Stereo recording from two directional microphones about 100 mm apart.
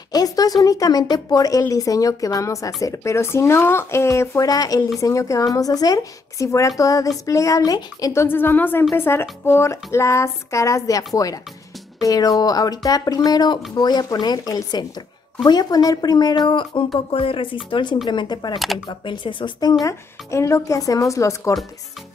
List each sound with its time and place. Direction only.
0.1 s a woman's voice: 40° left (ahead or behind)
17.1 s a woman's voice: 65° left (ahead or behind)
19.8 s speech: 30° left (ahead or behind)